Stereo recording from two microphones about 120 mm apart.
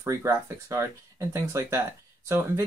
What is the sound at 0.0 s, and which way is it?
Speech, 20° right (ahead or behind).